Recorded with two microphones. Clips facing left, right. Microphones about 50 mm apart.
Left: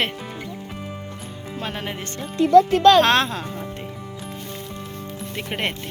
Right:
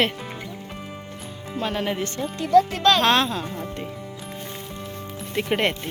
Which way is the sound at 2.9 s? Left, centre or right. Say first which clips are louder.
Left 3 dB; left.